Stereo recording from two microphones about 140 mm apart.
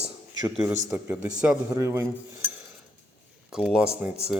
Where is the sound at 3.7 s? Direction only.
5° right (ahead or behind).